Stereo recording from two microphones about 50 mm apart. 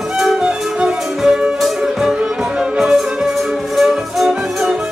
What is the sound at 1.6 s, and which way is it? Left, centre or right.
Music, centre.